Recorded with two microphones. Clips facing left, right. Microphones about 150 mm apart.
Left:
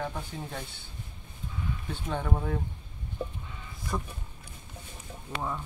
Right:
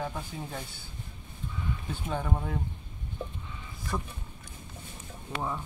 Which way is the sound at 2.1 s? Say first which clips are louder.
Left 2 dB; centre (ahead or behind).